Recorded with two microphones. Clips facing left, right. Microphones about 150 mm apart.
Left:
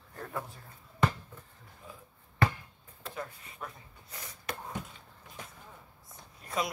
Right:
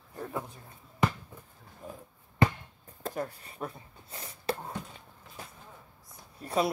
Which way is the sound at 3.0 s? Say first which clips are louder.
Right 6 dB; 40° right (ahead or behind).